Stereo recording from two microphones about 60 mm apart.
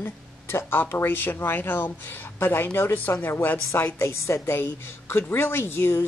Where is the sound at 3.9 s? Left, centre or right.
Left.